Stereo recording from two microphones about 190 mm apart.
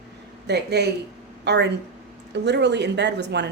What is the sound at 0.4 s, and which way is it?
A woman's voice, 60° right (ahead or behind).